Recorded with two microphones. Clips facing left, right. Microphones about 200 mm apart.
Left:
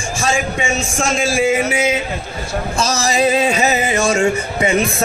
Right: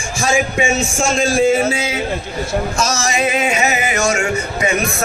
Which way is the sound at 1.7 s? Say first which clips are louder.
Left 4 dB; 20° left (ahead or behind).